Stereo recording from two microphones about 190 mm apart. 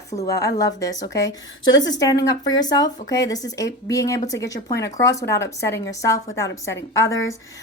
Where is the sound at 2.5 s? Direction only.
20° left (ahead or behind).